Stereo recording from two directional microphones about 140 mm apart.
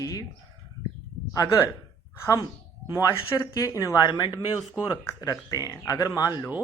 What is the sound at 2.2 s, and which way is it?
Speech, 20° left (ahead or behind).